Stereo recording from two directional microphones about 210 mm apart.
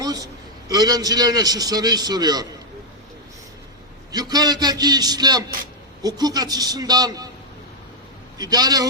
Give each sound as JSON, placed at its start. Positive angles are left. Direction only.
{"t": 0.0, "sound": "a sound", "side_deg": -15}
{"t": 0.7, "sound": "a man's voice", "side_deg": -20}
{"t": 4.1, "sound": "a man's voice", "side_deg": -20}
{"t": 8.4, "sound": "a man's voice", "side_deg": -20}